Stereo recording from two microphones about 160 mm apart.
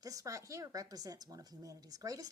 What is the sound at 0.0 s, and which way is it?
A woman's voice, 20° right (ahead or behind).